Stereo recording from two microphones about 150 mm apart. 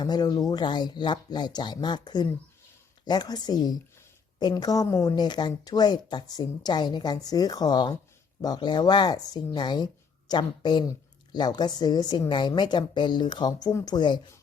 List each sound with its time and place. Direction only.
0.0 s speech: 25° left (ahead or behind)